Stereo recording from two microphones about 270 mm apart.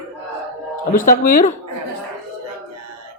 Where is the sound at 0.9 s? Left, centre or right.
Left.